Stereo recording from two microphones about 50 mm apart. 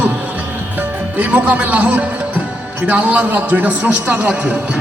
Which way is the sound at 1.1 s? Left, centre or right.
Right.